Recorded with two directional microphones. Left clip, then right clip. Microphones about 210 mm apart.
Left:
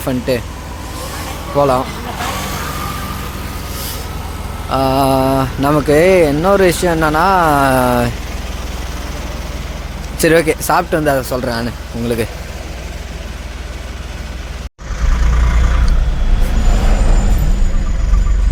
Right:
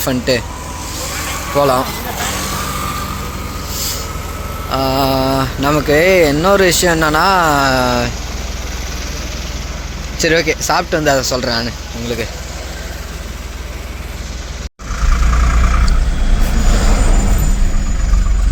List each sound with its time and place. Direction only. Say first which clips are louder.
0.0 s speech: right 2 dB; 5° left (ahead or behind)
1.5 s speech: even; 5° left (ahead or behind)
4.7 s speech: left 2 dB; 20° left (ahead or behind)
10.2 s speech: left 2 dB; 25° left (ahead or behind)
12.0 s speech: left 3 dB; 25° left (ahead or behind)